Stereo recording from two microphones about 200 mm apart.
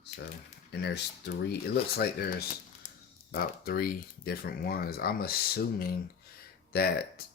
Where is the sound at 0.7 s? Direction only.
55° left (ahead or behind).